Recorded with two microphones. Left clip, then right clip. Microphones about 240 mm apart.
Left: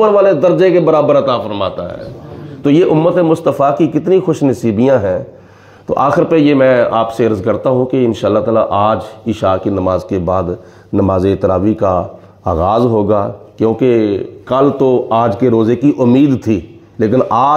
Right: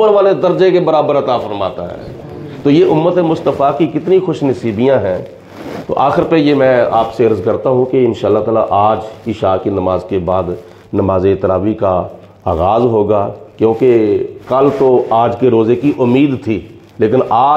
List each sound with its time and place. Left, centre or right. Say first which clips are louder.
0.0 s a man's voice: left 1 dB; left